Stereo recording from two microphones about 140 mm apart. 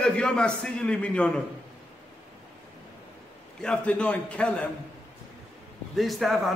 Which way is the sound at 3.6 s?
5° left (ahead or behind).